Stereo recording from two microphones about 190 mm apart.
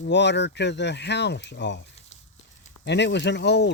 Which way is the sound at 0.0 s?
65° left (ahead or behind).